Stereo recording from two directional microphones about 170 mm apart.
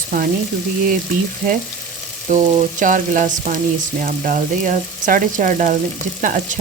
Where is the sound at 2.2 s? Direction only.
50° right (ahead or behind).